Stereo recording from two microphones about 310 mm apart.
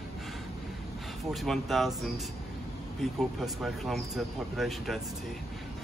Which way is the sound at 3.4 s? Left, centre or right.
Centre.